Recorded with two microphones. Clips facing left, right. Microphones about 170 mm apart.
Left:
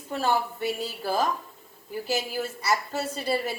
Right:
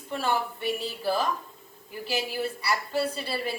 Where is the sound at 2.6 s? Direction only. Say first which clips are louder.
Left 1 dB; 45° left (ahead or behind).